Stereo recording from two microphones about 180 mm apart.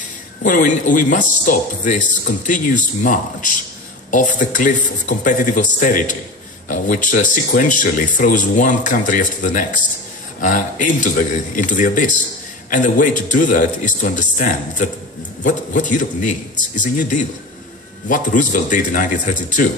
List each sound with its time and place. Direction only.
0.4 s speech: 45° left (ahead or behind)